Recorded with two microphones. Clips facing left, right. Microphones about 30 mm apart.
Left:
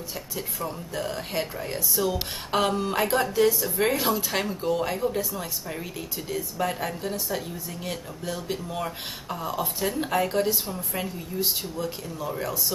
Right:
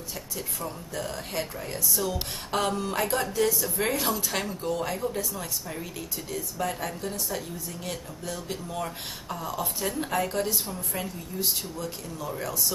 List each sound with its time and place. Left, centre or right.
0.4 s speech: centre